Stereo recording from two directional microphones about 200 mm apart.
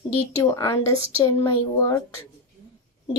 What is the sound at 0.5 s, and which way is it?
Speech, 15° left (ahead or behind).